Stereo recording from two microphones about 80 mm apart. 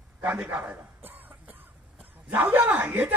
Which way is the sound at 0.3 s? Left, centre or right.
Right.